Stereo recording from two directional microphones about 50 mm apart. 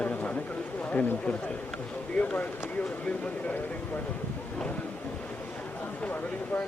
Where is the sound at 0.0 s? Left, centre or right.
Left.